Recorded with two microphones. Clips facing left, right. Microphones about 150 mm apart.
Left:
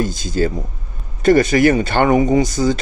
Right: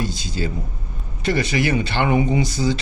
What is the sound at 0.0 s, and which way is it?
Speech, 50° left (ahead or behind).